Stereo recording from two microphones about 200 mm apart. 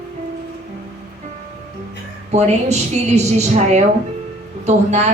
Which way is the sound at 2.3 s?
35° right (ahead or behind).